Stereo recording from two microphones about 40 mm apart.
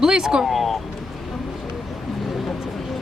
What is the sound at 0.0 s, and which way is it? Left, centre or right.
Speech, centre.